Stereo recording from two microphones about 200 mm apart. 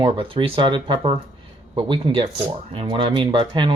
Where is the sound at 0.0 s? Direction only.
25° right (ahead or behind).